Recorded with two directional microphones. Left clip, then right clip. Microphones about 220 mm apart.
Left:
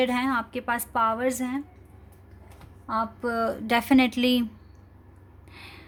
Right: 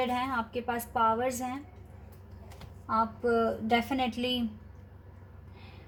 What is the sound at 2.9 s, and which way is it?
Speech, 50° left (ahead or behind).